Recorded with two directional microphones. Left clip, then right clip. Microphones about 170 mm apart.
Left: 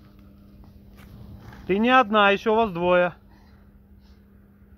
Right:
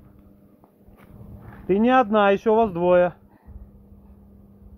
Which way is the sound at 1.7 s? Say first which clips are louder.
Even; 15° right (ahead or behind).